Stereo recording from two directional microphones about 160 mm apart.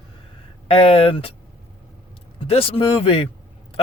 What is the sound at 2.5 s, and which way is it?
Speech, 35° left (ahead or behind).